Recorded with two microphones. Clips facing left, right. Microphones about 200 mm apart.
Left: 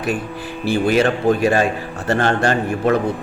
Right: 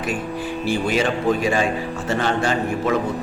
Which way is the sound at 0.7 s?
60° left (ahead or behind).